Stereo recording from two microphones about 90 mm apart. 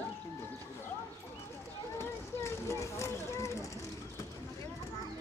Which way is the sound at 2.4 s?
35° left (ahead or behind).